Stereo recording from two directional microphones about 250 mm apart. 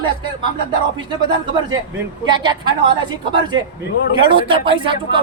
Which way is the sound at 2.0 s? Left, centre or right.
Centre.